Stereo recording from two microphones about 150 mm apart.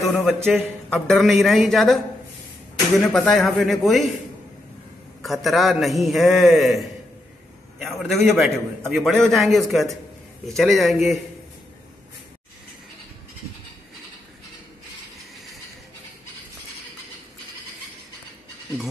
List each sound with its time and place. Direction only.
0.0 s a man's voice: centre (ahead or behind)
3.0 s a man's voice: centre (ahead or behind)
5.2 s a man's voice: centre (ahead or behind)